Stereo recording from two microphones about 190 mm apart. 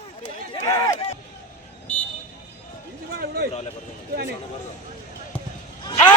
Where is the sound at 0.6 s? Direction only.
20° left (ahead or behind).